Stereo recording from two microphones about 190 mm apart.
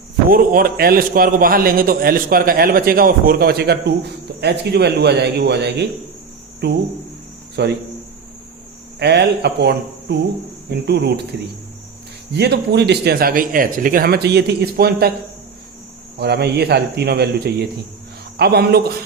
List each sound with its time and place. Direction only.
0.3 s a man's voice: 50° right (ahead or behind)
9.0 s speech: 60° right (ahead or behind)
12.3 s speech: 60° right (ahead or behind)
16.1 s speech: 60° right (ahead or behind)